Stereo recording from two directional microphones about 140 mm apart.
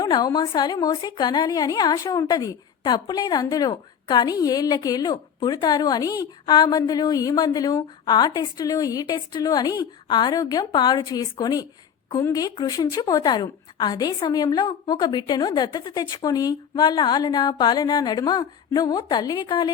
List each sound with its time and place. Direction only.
0.0 s a woman's voice: 30° left (ahead or behind)